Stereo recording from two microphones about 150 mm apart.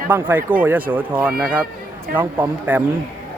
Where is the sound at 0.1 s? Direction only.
10° right (ahead or behind).